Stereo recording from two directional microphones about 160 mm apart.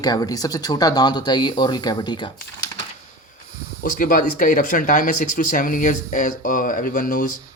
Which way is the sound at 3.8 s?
60° left (ahead or behind).